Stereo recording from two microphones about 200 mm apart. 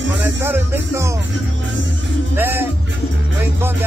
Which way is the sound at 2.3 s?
10° right (ahead or behind).